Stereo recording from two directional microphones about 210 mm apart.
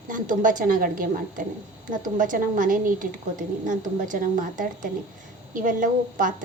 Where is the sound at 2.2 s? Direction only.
40° right (ahead or behind).